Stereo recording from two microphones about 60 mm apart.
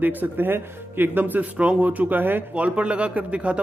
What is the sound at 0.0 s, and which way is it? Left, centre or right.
Speech, right.